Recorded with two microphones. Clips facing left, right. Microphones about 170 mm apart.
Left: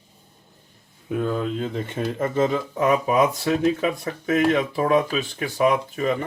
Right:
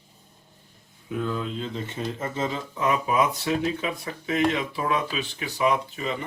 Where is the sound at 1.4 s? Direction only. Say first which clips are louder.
Left 5 dB; 50° left (ahead or behind).